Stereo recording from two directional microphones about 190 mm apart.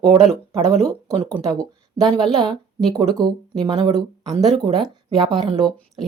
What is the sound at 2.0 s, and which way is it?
Speech, 25° right (ahead or behind).